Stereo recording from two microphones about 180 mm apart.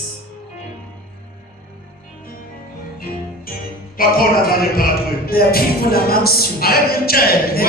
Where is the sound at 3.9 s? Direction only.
55° left (ahead or behind).